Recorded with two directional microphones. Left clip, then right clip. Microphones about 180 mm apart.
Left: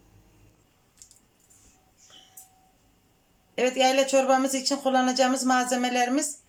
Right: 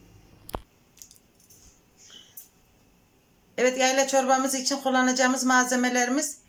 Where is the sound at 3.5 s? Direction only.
10° left (ahead or behind).